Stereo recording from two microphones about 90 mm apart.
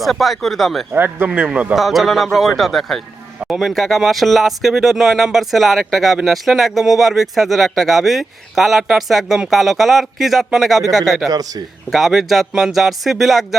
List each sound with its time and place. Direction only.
0.0 s speech: centre (ahead or behind)
0.9 s a man's voice: 20° right (ahead or behind)
1.7 s speech: centre (ahead or behind)
11.3 s a man's voice: 45° right (ahead or behind)
11.9 s speech: centre (ahead or behind)